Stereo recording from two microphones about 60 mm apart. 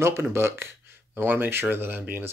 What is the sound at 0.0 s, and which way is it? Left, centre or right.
Speech, right.